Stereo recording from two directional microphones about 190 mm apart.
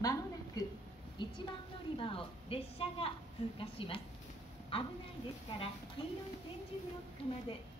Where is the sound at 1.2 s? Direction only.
25° left (ahead or behind).